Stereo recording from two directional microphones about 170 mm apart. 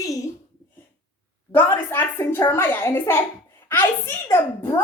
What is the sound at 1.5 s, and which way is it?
Speech, 10° left (ahead or behind).